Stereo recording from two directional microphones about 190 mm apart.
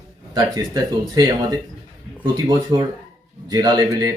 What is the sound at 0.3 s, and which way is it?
A man's voice, 20° right (ahead or behind).